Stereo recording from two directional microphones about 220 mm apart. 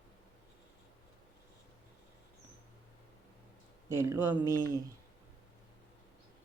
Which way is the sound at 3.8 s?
10° right (ahead or behind).